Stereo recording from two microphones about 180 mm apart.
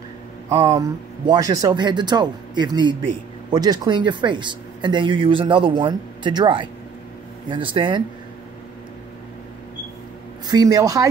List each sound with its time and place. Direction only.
0.5 s speech: 30° right (ahead or behind)
10.4 s speech: 20° right (ahead or behind)